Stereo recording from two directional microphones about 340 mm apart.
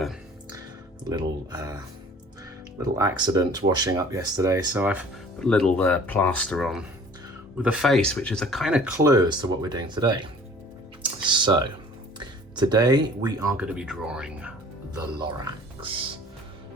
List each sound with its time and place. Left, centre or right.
0.0 s a sound: centre
1.1 s speech: centre
3.0 s speech: centre
11.0 s music: centre
12.2 s speech: centre
15.8 s speech: centre